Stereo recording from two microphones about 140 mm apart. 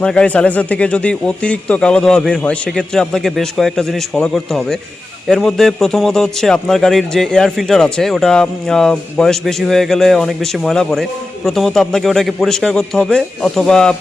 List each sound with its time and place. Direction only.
0.0 s a man's voice: 5° left (ahead or behind)